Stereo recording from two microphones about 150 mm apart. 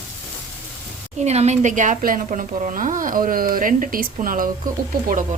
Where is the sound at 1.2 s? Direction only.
50° right (ahead or behind).